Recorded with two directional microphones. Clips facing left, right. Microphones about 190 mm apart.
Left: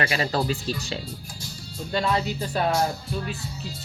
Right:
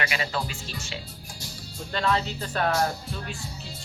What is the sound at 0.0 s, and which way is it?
Speech, 35° left (ahead or behind).